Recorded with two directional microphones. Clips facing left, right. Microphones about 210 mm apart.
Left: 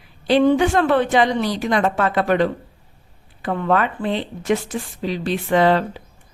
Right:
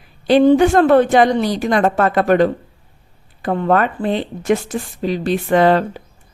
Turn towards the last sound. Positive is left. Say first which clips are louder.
# right 3 dB
turn(degrees=-45)  # may be behind; listen again after turning